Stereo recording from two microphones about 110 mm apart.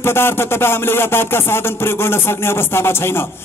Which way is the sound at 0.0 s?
20° left (ahead or behind).